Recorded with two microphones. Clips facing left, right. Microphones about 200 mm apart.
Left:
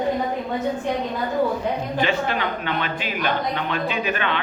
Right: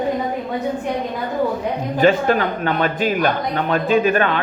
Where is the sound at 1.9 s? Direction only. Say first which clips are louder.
Right 11 dB; 45° right (ahead or behind).